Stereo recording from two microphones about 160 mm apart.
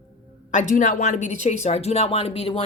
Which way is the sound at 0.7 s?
50° left (ahead or behind).